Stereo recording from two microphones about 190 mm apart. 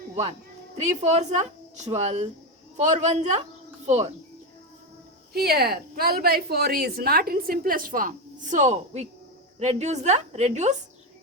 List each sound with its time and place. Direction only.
0.8 s a woman's voice: 40° right (ahead or behind)
5.3 s a woman's voice: 55° right (ahead or behind); by 10.8 s 40° right (ahead or behind)